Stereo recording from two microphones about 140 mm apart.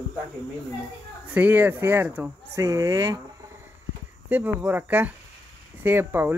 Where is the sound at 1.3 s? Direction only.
10° right (ahead or behind).